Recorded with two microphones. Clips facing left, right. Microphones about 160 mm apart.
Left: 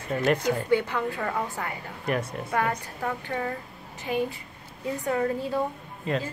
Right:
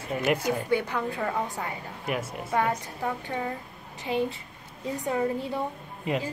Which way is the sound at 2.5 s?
15° right (ahead or behind).